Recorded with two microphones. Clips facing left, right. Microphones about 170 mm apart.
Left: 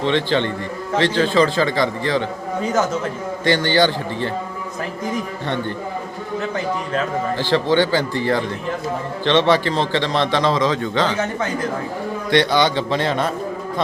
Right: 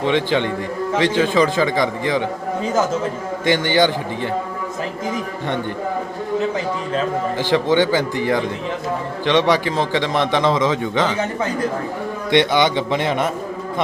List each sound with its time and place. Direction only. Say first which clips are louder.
0.0 s a man's voice: right 1 dB; 10° right (ahead or behind)
3.4 s a man's voice: even; 15° right (ahead or behind)
7.3 s a man's voice: right 1 dB; 15° right (ahead or behind)
12.3 s a man's voice: right 1 dB; 20° right (ahead or behind)